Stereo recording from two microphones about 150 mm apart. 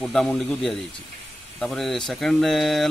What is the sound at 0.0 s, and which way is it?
Speech, 5° left (ahead or behind).